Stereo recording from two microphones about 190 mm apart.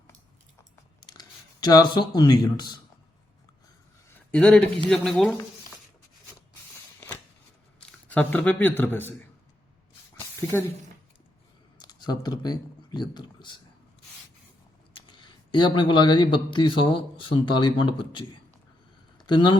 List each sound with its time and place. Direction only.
1.0 s speech: 20° left (ahead or behind)
4.3 s speech: 5° left (ahead or behind)
7.8 s speech: 5° left (ahead or behind)
10.4 s speech: 10° left (ahead or behind)
11.8 s speech: 20° left (ahead or behind)
14.9 s speech: 25° left (ahead or behind)